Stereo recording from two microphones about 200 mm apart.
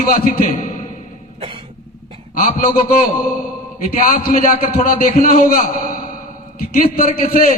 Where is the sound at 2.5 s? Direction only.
45° left (ahead or behind).